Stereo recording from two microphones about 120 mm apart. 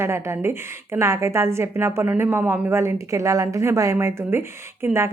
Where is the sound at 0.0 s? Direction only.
20° right (ahead or behind).